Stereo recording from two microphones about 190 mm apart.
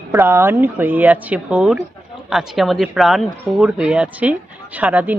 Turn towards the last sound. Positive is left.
turn(degrees=-10)  # may be behind; listen again after turning